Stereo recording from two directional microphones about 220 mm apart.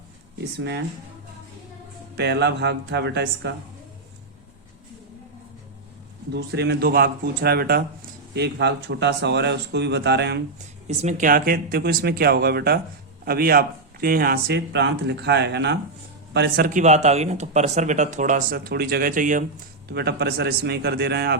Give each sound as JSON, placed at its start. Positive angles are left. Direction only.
{"t": 0.3, "sound": "speech", "side_deg": -50}
{"t": 2.1, "sound": "speech", "side_deg": -50}
{"t": 6.3, "sound": "speech", "side_deg": -50}
{"t": 10.8, "sound": "speech", "side_deg": -35}
{"t": 19.9, "sound": "speech", "side_deg": -50}